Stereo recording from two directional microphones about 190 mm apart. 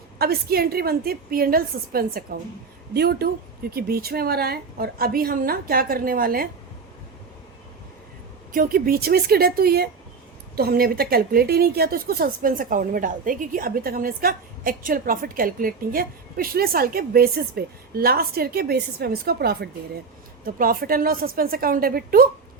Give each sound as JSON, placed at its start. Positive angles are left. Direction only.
{"t": 0.2, "sound": "a woman's voice", "side_deg": -55}
{"t": 8.5, "sound": "a woman's voice", "side_deg": -50}